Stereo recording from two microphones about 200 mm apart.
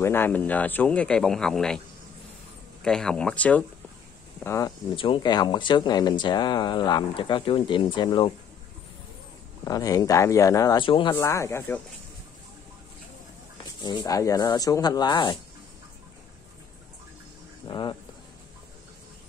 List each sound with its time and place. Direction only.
0.0 s speech: 10° left (ahead or behind)
2.8 s speech: 5° left (ahead or behind); by 8.3 s 25° left (ahead or behind)
9.7 s speech: 15° left (ahead or behind)
11.1 s speech: 15° left (ahead or behind)
13.8 s speech: 20° left (ahead or behind)
17.6 s speech: 20° left (ahead or behind)